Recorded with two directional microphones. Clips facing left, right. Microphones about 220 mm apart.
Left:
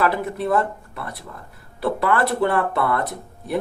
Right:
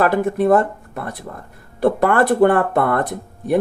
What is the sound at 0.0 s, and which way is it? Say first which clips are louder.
Speech: right 6 dB; 50° right (ahead or behind).